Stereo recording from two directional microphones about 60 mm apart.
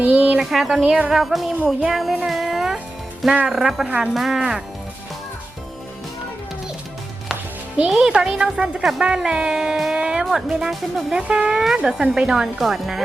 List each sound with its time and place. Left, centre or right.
0.0 s a sound: right
0.3 s speech: centre
7.9 s speech: centre
10.0 s music: centre
10.2 s speech: centre
11.2 s speech: centre
11.5 s speech: centre